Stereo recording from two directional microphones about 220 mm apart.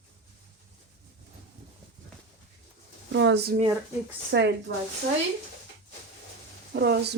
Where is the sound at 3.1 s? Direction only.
50° right (ahead or behind).